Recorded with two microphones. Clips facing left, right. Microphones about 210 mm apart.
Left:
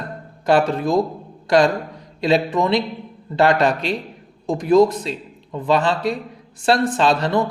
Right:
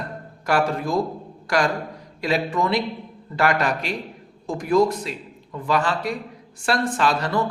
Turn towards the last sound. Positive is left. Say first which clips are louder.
# left 4 dB
turn(degrees=25)  # may be behind; listen again after turning